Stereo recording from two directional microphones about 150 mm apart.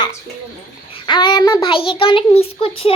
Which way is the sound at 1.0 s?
30° left (ahead or behind).